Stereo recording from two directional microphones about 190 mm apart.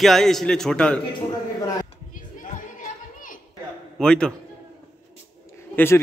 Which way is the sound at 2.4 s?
45° left (ahead or behind).